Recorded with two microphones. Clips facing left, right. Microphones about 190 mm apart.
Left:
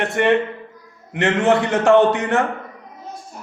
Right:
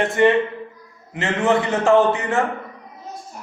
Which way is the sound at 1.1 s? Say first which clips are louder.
Left 3 dB; 75° left (ahead or behind).